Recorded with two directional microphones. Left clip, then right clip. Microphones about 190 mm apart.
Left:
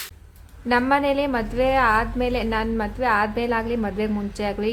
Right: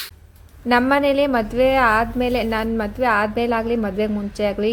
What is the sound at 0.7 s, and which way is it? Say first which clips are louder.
A woman's voice: right 3 dB; 20° right (ahead or behind).